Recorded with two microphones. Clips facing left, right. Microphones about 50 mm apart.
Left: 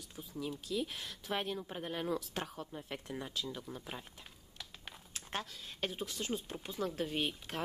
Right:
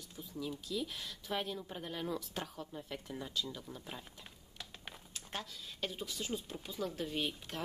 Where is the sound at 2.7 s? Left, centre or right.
Centre.